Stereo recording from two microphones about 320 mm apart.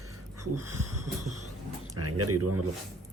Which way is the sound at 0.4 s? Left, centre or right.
Right.